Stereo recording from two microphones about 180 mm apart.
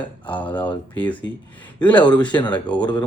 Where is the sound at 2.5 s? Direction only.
5° left (ahead or behind).